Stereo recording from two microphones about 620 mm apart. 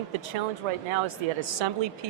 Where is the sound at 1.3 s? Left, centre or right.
Right.